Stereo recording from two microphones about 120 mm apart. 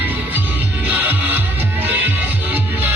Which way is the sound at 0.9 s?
15° right (ahead or behind).